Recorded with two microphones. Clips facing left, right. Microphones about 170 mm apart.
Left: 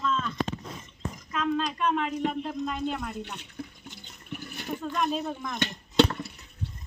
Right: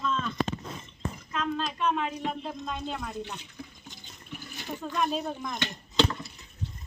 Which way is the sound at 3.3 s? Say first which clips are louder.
Left 3 dB; 65° left (ahead or behind).